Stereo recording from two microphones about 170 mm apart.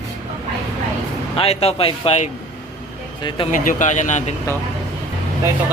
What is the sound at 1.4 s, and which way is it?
A man's voice, 35° left (ahead or behind).